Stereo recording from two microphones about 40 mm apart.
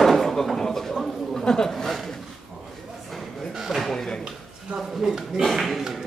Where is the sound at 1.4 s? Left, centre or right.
Centre.